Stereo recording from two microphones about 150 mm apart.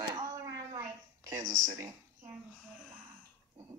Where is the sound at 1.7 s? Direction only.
20° right (ahead or behind).